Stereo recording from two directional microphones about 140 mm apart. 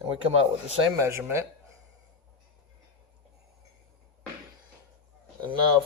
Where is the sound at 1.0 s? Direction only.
20° right (ahead or behind).